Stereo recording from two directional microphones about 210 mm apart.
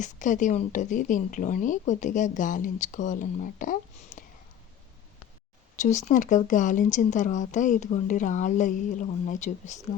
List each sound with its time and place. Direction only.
0.0 s speech: 35° left (ahead or behind)
5.8 s speech: 35° left (ahead or behind)